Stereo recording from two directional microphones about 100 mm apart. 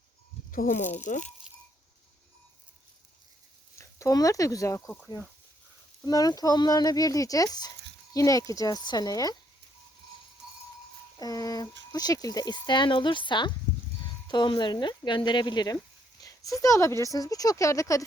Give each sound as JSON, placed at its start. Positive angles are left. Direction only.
{"t": 0.9, "sound": "speech", "side_deg": 20}
{"t": 3.8, "sound": "speech", "side_deg": 30}
{"t": 6.1, "sound": "speech", "side_deg": 40}
{"t": 11.2, "sound": "speech", "side_deg": 40}